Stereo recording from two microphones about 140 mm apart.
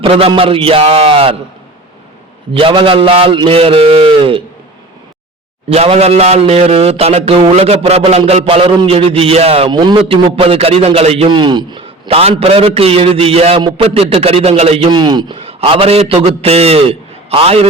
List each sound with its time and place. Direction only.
0.0 s a man's voice: 40° right (ahead or behind)
2.5 s a man's voice: 40° right (ahead or behind)
5.6 s a man's voice: 45° right (ahead or behind)
9.6 s a man's voice: 35° right (ahead or behind)
11.3 s a man's voice: 35° right (ahead or behind)
13.6 s a man's voice: 35° right (ahead or behind)
13.8 s a man's voice: 45° right (ahead or behind)
14.8 s a man's voice: 30° right (ahead or behind)